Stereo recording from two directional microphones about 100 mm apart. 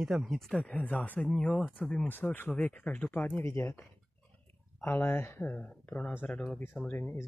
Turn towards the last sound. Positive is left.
turn(degrees=20)  # may be behind; listen again after turning